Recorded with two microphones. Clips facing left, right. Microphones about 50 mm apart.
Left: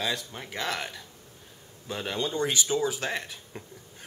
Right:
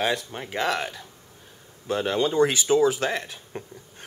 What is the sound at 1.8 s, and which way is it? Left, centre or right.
Speech, right.